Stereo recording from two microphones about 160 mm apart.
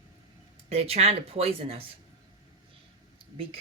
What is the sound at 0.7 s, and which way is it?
Speech, 40° right (ahead or behind).